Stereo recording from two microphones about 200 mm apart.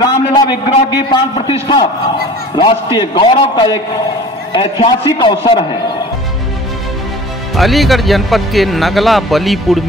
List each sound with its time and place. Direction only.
0.0 s a man's voice: 20° left (ahead or behind)
7.5 s speech: centre (ahead or behind)